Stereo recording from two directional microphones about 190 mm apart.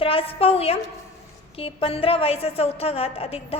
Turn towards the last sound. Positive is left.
turn(degrees=30)  # may be behind; listen again after turning